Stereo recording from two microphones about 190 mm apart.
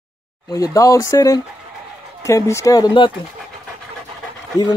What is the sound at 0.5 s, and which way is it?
Speech, 15° left (ahead or behind).